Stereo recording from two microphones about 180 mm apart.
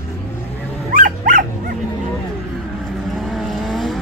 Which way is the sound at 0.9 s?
50° right (ahead or behind).